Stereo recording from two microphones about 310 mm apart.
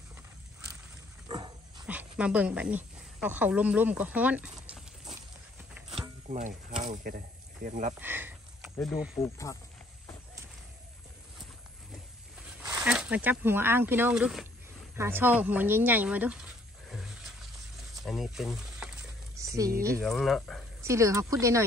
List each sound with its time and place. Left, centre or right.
1.3 s dog: centre
5.9 s a sound: right
7.6 s speech: right
8.0 s a sound: centre
8.7 s speech: centre
12.6 s speech: centre
16.9 s a sound: centre
20.0 s speech: centre
20.8 s speech: centre